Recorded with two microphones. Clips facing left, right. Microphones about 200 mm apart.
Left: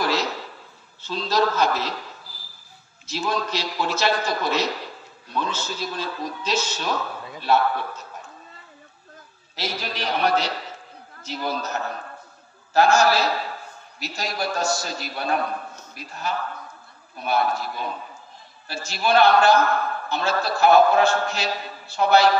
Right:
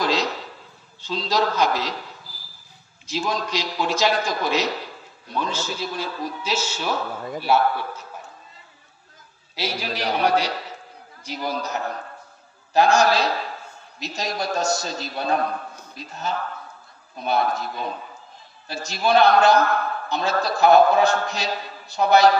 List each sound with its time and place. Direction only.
0.0 s a sound: 15° right (ahead or behind)
1.0 s a man's voice: 15° right (ahead or behind)
3.1 s a man's voice: 15° right (ahead or behind)
9.6 s a man's voice: 10° right (ahead or behind)